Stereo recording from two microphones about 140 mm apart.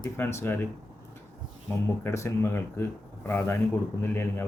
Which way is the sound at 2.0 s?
20° left (ahead or behind).